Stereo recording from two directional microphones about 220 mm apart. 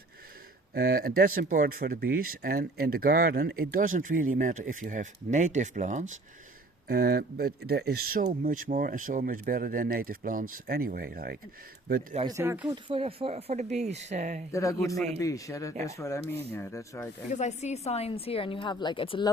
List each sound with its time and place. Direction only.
0.7 s speech: 45° right (ahead or behind)
6.8 s speech: 45° right (ahead or behind)
12.3 s speech: 10° right (ahead or behind)
12.7 s speech: 25° right (ahead or behind)
14.5 s speech: 15° left (ahead or behind)
15.7 s speech: 30° right (ahead or behind)
16.0 s speech: 15° left (ahead or behind)
17.2 s a woman's voice: 30° left (ahead or behind)